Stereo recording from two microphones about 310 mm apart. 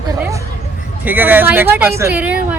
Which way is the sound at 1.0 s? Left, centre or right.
Centre.